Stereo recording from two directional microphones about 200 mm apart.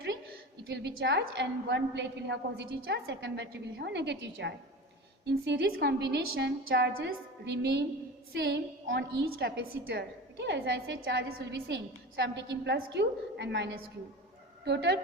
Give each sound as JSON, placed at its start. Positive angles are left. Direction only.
{"t": 0.7, "sound": "a woman's voice", "side_deg": -60}